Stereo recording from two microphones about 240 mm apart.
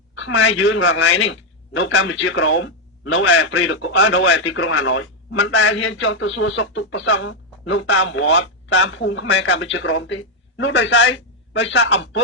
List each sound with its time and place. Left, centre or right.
0.2 s a man's voice: left